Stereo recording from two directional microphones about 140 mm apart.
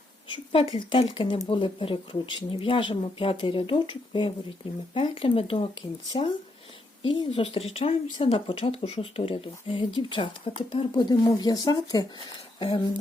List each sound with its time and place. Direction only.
0.3 s speech: 40° left (ahead or behind)